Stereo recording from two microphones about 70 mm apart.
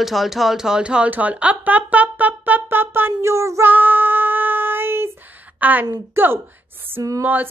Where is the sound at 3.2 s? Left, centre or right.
Right.